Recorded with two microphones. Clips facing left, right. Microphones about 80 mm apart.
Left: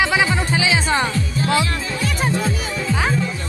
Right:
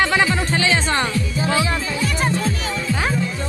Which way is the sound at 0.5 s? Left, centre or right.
Centre.